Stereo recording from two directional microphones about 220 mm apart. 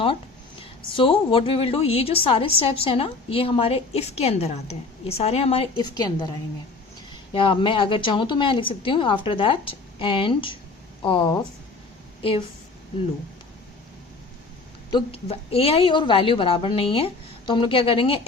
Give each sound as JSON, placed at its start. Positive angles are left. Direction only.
{"t": 0.6, "sound": "a woman's voice", "side_deg": 25}
{"t": 14.8, "sound": "a woman's voice", "side_deg": 25}